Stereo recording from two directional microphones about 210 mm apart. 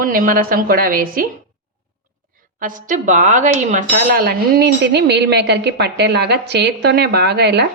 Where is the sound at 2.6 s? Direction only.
40° right (ahead or behind).